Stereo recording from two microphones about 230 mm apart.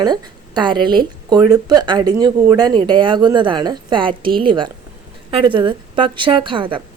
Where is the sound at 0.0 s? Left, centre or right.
Centre.